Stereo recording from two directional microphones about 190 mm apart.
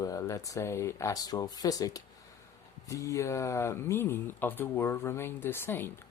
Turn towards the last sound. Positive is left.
turn(degrees=10)  # may be behind; listen again after turning